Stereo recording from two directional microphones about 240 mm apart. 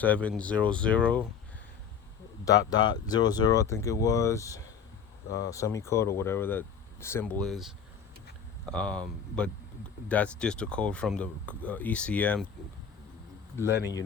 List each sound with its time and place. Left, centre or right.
0.0 s speech: centre
2.4 s speech: centre
13.7 s speech: centre